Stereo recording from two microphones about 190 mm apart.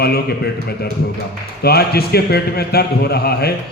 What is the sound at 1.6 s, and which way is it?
A man's voice, 55° left (ahead or behind).